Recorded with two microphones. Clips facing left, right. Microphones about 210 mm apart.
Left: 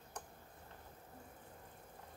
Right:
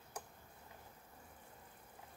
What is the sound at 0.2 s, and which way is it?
Tick-tock, 10° right (ahead or behind).